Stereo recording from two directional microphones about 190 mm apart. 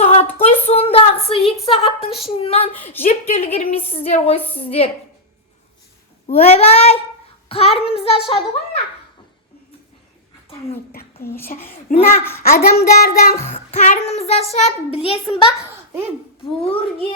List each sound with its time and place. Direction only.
0.0 s a sound: 30° left (ahead or behind)
2.0 s a woman's voice: centre (ahead or behind)
2.4 s a child's voice: 30° left (ahead or behind)
6.2 s a child's voice: 35° left (ahead or behind)
11.5 s a child's voice: 40° left (ahead or behind)
11.9 s child singing: 50° left (ahead or behind)
13.7 s a child's voice: 35° left (ahead or behind)